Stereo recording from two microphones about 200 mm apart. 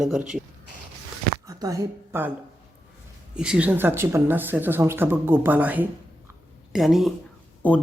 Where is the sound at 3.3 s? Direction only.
5° right (ahead or behind).